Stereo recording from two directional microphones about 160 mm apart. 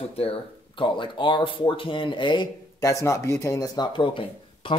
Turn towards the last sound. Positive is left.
turn(degrees=30)  # may be behind; listen again after turning